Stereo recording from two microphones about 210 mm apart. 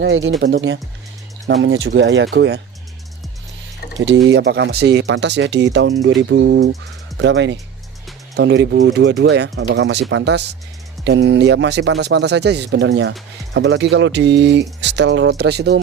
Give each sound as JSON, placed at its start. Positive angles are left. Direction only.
{"t": 0.0, "sound": "speech", "side_deg": -60}
{"t": 4.0, "sound": "speech", "side_deg": -60}